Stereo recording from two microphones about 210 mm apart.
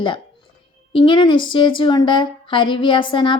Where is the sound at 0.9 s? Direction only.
25° left (ahead or behind).